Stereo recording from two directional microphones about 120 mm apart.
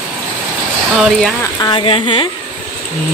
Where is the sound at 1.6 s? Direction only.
45° left (ahead or behind).